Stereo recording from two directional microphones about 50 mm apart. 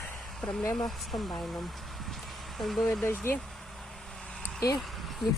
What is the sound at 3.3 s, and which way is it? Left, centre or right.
Speech, left.